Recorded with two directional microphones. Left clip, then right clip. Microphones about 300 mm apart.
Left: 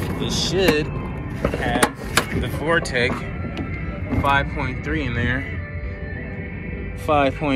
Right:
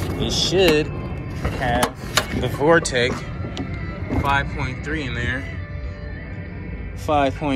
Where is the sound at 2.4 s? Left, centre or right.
Right.